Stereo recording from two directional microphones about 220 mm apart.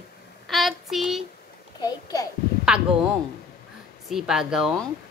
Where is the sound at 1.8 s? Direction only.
15° left (ahead or behind).